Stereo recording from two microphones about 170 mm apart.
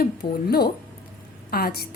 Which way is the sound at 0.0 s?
65° left (ahead or behind).